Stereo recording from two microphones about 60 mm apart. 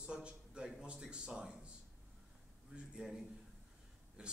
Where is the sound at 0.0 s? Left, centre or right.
Centre.